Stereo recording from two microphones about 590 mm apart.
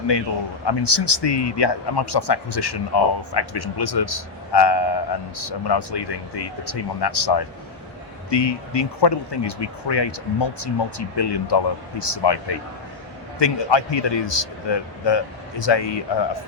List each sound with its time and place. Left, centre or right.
0.7 s speech: left